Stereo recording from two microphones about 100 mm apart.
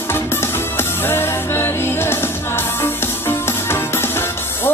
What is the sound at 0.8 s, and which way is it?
Music, 25° left (ahead or behind).